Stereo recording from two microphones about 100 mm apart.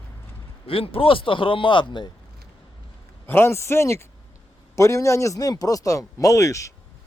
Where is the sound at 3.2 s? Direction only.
25° left (ahead or behind).